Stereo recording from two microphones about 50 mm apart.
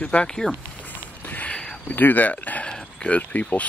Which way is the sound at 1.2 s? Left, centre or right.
Left.